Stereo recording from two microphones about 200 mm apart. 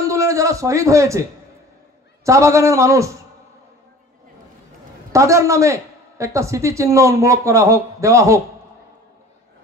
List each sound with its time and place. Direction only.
0.0 s a sound: 15° right (ahead or behind)
2.2 s a woman's voice: 15° right (ahead or behind)
5.1 s a woman's voice: 15° right (ahead or behind)